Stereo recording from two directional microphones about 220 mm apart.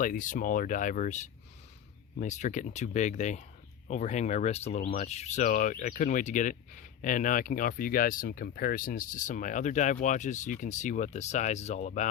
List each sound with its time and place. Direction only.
0.0 s speech: 35° left (ahead or behind)